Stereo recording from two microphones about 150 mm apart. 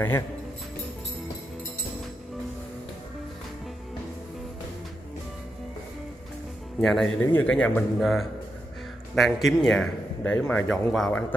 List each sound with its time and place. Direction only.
6.8 s speech: 5° left (ahead or behind)
10.3 s speech: 15° left (ahead or behind)
10.7 s speech: 5° left (ahead or behind)